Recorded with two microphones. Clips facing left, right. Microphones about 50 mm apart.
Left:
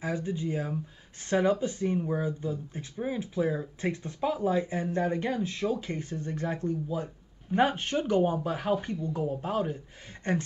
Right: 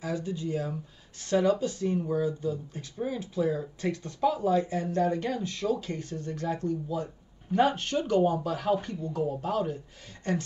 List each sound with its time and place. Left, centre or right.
0.0 s speech: left